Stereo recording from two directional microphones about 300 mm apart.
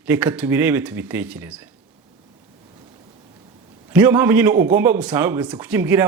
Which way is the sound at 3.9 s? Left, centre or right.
Centre.